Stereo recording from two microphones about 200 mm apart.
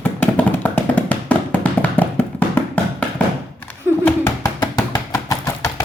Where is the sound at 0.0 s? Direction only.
10° left (ahead or behind).